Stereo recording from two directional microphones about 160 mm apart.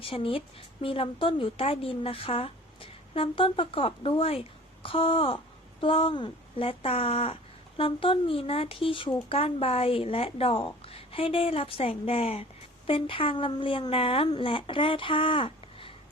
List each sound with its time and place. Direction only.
0.0 s a woman's voice: 35° left (ahead or behind)